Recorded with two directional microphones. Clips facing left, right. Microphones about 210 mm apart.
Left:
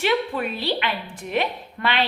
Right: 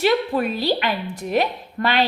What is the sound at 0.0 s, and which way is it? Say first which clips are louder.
A woman's voice: right 4 dB; 40° right (ahead or behind).